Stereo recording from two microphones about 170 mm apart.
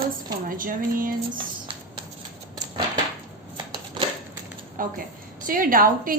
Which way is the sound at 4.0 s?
30° right (ahead or behind).